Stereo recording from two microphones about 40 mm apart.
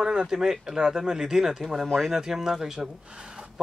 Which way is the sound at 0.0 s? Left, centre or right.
Centre.